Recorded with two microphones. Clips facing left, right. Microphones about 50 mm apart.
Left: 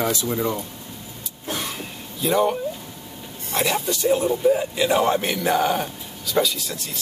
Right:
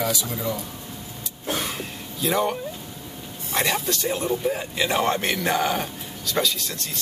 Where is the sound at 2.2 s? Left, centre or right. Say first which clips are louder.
Left 3 dB; centre.